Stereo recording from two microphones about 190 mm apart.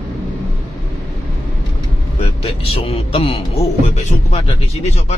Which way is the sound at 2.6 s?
30° left (ahead or behind).